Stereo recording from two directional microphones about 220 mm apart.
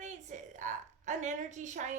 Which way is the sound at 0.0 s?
35° right (ahead or behind).